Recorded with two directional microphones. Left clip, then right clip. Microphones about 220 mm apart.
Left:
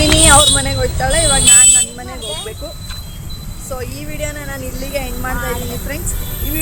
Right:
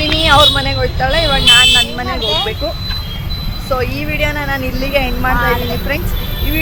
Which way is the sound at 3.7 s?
Centre (ahead or behind).